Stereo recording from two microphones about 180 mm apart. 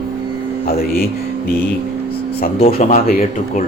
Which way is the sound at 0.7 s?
55° left (ahead or behind).